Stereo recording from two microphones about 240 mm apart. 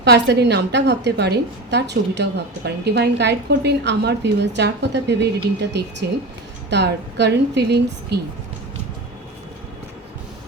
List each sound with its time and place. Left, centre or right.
0.0 s a woman's voice: right